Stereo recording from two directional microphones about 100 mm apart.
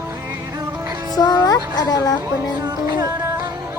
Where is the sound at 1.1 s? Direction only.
40° left (ahead or behind).